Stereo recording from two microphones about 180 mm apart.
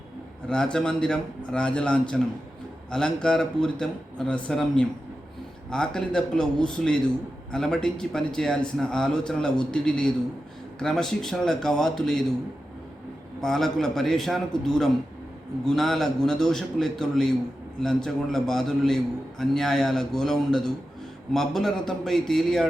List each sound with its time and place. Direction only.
0.4 s a man's voice: 5° left (ahead or behind)
13.4 s a man's voice: centre (ahead or behind)